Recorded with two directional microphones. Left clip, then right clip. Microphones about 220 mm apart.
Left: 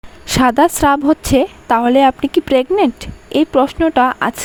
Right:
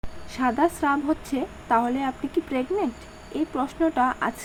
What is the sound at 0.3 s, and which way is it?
A woman's voice, 50° left (ahead or behind).